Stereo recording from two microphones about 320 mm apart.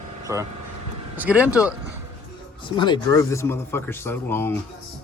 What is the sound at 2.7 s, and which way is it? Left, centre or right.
Speech, centre.